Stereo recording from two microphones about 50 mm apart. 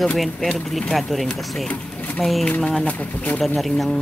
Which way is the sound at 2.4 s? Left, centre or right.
Left.